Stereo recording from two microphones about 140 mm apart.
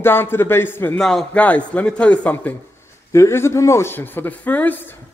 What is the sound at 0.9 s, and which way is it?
Speech, 5° left (ahead or behind).